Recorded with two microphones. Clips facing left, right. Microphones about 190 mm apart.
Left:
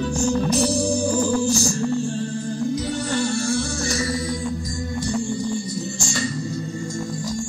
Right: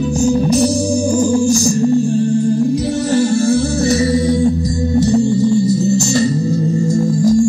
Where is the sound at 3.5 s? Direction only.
20° right (ahead or behind).